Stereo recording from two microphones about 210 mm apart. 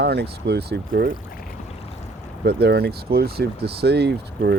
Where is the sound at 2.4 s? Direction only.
50° right (ahead or behind).